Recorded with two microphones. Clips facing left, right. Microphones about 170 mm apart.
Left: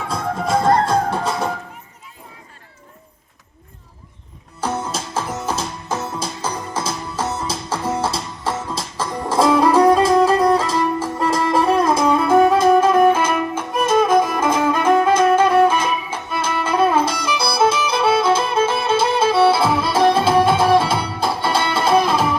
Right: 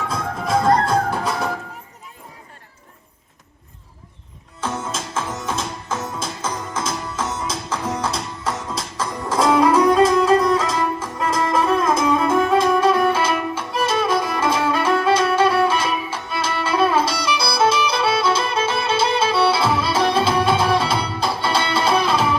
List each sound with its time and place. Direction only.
0.1 s music: 25° left (ahead or behind)
4.6 s music: 40° left (ahead or behind)